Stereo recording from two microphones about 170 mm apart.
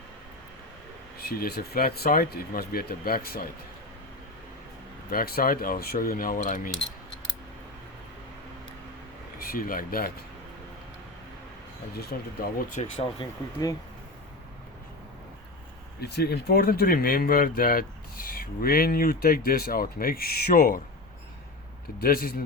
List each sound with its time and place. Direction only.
1.3 s speech: 65° left (ahead or behind)
5.1 s speech: 60° left (ahead or behind)
9.4 s speech: 60° left (ahead or behind)
11.9 s speech: 65° left (ahead or behind)
12.7 s speech: 35° left (ahead or behind)
16.0 s speech: 70° left (ahead or behind); by 20.8 s 50° left (ahead or behind)
22.0 s speech: 60° left (ahead or behind)